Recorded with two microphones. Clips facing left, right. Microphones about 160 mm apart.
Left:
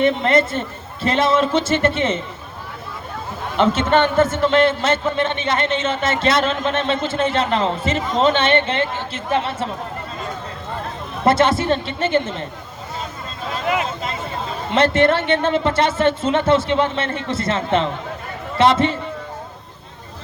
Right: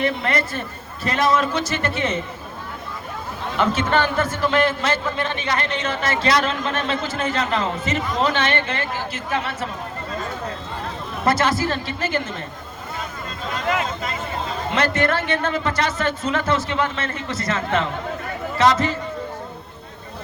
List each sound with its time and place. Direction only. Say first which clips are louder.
0.0 s a man's voice: left 6 dB; 25° left (ahead or behind)
3.6 s a man's voice: left 4 dB; 25° left (ahead or behind)
11.3 s a man's voice: left 4 dB; 25° left (ahead or behind)
13.7 s a man's voice: left 2 dB; 25° left (ahead or behind)